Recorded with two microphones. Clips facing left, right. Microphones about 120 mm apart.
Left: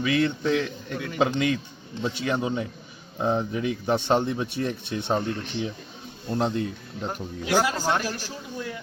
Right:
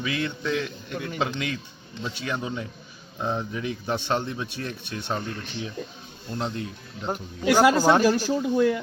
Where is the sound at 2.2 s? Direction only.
25° left (ahead or behind).